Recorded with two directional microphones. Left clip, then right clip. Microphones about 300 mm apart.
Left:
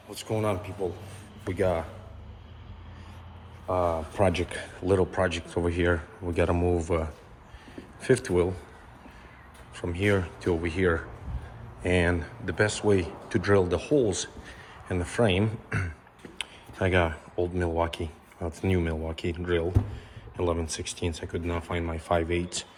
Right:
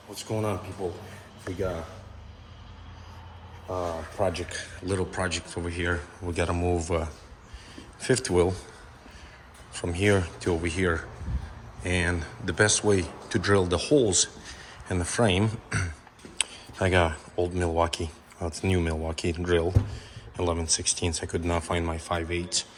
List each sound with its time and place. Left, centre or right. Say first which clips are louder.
0.1 s speech: left 1 dB; centre
4.2 s a man's voice: left 2 dB; left
4.9 s speech: left 5 dB; centre
9.7 s speech: right 2 dB; centre